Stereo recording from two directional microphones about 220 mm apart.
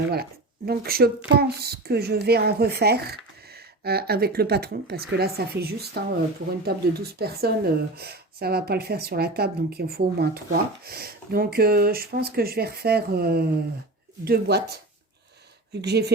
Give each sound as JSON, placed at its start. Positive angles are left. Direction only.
{"t": 0.1, "sound": "speech", "side_deg": -45}
{"t": 15.7, "sound": "speech", "side_deg": -50}